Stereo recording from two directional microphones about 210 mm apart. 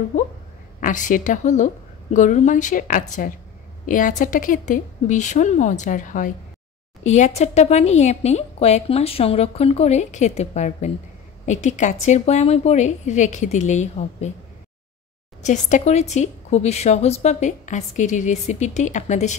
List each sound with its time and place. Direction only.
0.7 s a woman's voice: 40° left (ahead or behind)
15.4 s a woman's voice: 35° left (ahead or behind)